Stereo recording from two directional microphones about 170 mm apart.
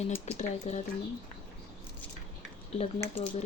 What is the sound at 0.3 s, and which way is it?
Speech, 40° left (ahead or behind).